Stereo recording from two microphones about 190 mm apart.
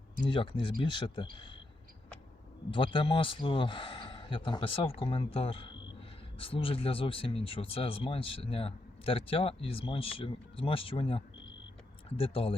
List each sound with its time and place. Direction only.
0.3 s speech: 25° left (ahead or behind)
2.6 s speech: 25° left (ahead or behind)